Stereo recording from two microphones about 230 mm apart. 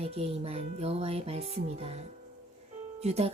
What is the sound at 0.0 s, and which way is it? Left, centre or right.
Music, right.